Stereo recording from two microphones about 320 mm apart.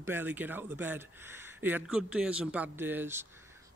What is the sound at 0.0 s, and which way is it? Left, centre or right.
Speech, centre.